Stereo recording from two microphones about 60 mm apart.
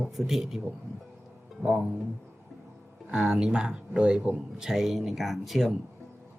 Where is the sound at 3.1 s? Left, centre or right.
Centre.